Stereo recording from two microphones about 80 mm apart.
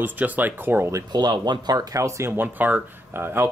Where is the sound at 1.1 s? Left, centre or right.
Right.